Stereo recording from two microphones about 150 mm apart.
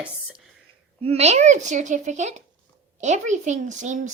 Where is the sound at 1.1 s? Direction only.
45° right (ahead or behind).